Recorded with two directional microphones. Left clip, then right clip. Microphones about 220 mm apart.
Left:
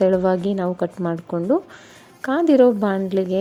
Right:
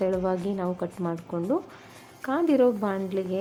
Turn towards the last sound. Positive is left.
turn(degrees=30)  # may be behind; listen again after turning